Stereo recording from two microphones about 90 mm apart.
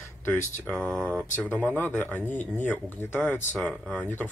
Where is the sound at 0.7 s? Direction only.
5° left (ahead or behind).